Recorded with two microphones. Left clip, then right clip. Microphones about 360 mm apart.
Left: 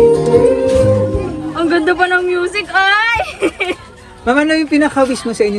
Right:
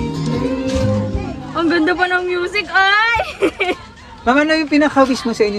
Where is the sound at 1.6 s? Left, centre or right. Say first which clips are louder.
Left 2 dB; centre.